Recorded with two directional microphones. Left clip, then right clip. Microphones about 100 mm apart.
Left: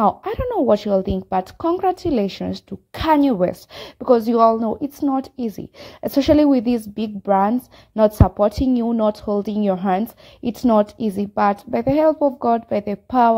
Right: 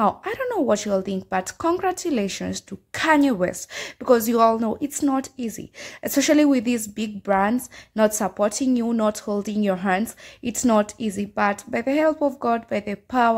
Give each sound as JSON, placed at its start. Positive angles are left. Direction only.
{"t": 0.0, "sound": "a woman's voice", "side_deg": 25}
{"t": 1.4, "sound": "a woman's voice", "side_deg": 10}
{"t": 3.7, "sound": "a woman's voice", "side_deg": 5}
{"t": 5.4, "sound": "a woman's voice", "side_deg": 25}